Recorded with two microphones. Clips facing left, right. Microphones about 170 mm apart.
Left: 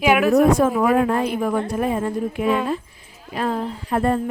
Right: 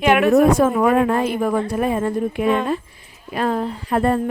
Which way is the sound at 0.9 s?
65° right (ahead or behind).